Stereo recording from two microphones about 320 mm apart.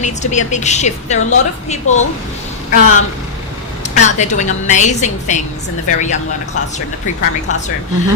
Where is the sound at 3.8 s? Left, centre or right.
Left.